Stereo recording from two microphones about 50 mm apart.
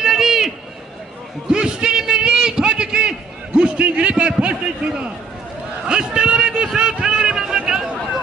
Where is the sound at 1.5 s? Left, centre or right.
Centre.